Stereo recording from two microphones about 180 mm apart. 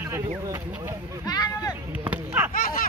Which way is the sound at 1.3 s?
20° left (ahead or behind).